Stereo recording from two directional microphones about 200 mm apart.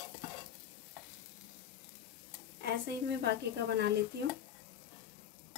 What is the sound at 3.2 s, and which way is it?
Speech, 55° right (ahead or behind).